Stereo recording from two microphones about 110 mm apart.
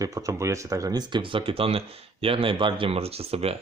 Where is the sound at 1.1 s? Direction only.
50° right (ahead or behind); by 3.6 s 65° right (ahead or behind).